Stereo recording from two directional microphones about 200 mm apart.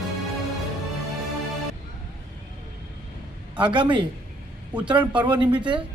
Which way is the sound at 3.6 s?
25° right (ahead or behind).